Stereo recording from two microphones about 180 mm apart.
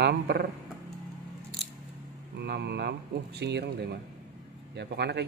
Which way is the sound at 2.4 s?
65° right (ahead or behind).